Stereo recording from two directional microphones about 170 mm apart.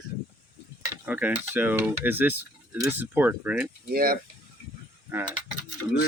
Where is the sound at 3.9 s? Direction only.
60° right (ahead or behind).